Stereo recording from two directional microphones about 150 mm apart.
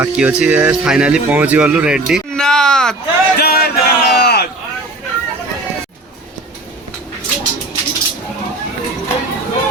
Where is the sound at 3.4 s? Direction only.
90° left.